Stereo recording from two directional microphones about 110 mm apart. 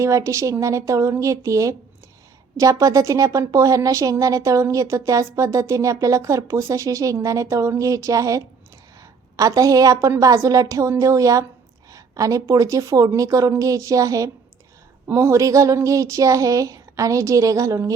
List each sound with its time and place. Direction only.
0.0 s a woman's voice: 30° right (ahead or behind)